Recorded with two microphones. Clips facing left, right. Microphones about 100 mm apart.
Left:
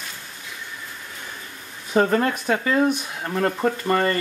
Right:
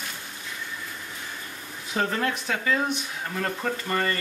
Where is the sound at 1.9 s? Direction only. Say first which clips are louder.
Left 7 dB; 45° left (ahead or behind).